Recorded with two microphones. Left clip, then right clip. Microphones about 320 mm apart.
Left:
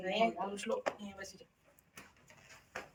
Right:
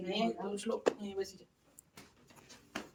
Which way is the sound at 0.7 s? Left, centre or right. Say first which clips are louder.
Even; right.